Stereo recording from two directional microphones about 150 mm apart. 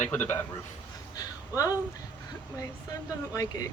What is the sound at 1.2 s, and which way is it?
Speech, 25° left (ahead or behind).